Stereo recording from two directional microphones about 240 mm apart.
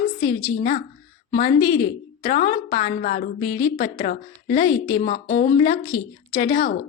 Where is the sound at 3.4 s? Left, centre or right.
Centre.